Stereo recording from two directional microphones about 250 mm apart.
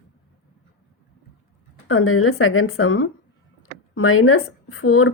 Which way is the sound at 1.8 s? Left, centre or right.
Left.